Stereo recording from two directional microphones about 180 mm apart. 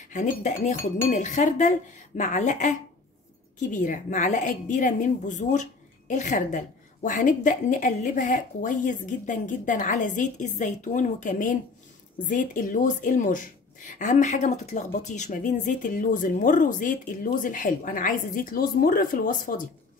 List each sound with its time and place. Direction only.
0.0 s a woman's voice: 45° left (ahead or behind)